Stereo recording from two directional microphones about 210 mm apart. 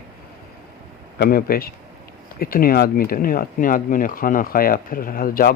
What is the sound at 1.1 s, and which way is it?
Speech, 45° left (ahead or behind).